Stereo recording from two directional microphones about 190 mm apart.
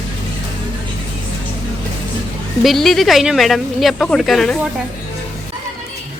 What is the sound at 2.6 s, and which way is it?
Speech, centre (ahead or behind).